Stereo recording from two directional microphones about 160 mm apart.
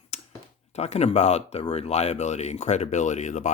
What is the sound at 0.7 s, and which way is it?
Speech, 45° left (ahead or behind).